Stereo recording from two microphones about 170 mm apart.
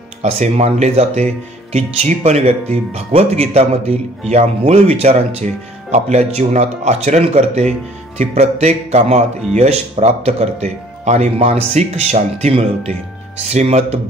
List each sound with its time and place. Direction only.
0.2 s speech: 40° right (ahead or behind)